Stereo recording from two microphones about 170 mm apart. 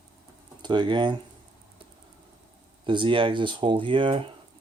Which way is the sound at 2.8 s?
30° right (ahead or behind).